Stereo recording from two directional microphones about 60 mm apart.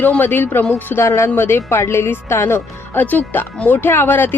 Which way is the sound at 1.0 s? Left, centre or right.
Left.